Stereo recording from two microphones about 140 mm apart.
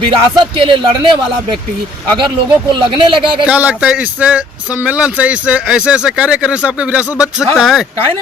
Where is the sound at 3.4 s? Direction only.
10° right (ahead or behind).